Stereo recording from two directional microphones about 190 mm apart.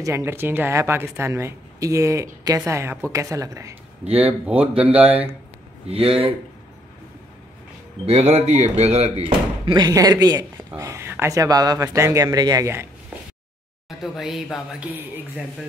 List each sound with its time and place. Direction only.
0.0 s a woman's voice: 15° right (ahead or behind)
5.9 s speech: 30° right (ahead or behind)
8.0 s a woman's voice: 35° right (ahead or behind); by 12.8 s 15° right (ahead or behind)
13.8 s speech: centre (ahead or behind)